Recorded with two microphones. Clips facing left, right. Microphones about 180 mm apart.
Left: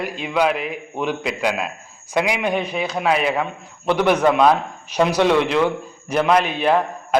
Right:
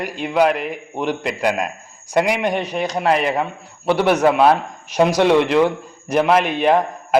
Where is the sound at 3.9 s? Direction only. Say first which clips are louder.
Right 1 dB; 10° right (ahead or behind).